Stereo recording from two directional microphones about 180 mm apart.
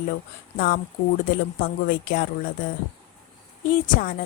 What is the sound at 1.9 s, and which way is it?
Speech, 55° left (ahead or behind).